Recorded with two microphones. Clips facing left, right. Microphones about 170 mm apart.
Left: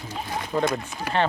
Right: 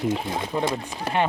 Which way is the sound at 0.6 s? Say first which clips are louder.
Even; 30° right (ahead or behind).